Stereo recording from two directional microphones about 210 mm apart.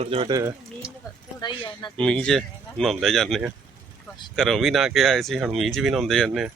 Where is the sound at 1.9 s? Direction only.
5° left (ahead or behind).